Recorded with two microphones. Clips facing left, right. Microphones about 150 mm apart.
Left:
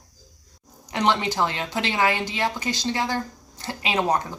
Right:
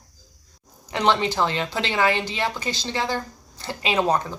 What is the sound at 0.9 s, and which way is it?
A woman's voice, 15° left (ahead or behind).